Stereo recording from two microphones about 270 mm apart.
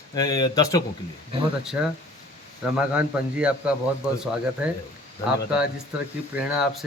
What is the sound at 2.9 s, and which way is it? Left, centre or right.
Speech, centre.